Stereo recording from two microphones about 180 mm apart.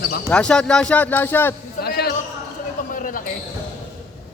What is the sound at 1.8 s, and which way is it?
Speech, 60° left (ahead or behind).